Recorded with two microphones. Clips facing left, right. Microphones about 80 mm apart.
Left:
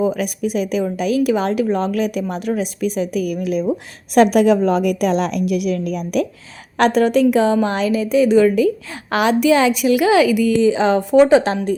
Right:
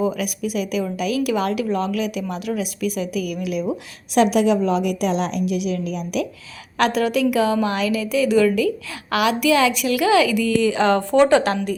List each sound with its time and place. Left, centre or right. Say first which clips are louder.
0.0 s a woman's voice: left 3 dB; left